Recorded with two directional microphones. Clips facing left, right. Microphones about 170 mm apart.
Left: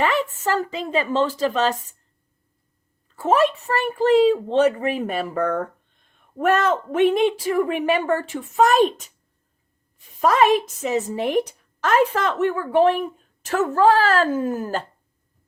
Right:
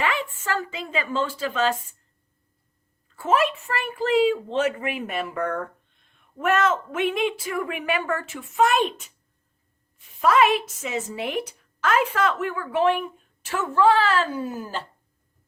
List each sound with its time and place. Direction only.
0.0 s a woman's voice: 40° left (ahead or behind)
3.2 s a woman's voice: 35° left (ahead or behind)
10.2 s a woman's voice: 40° left (ahead or behind)